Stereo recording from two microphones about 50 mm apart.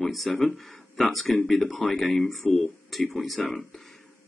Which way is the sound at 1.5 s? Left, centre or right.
Centre.